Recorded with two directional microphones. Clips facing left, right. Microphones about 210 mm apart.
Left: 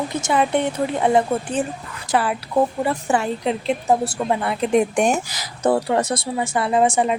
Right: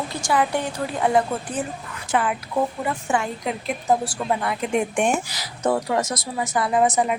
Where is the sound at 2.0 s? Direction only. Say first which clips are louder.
Left 2 dB; 35° left (ahead or behind).